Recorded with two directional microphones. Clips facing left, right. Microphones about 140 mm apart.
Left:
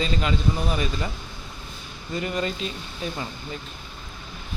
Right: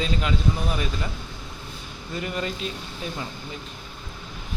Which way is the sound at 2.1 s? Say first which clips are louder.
Left 2 dB; centre (ahead or behind).